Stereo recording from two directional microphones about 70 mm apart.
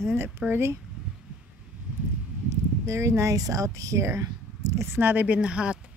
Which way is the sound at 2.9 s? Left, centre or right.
Right.